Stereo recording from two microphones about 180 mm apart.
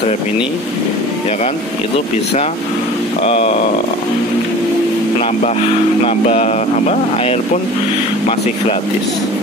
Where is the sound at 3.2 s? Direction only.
35° left (ahead or behind).